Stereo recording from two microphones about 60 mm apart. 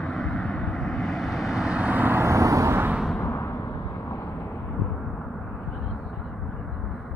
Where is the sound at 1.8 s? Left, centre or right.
Right.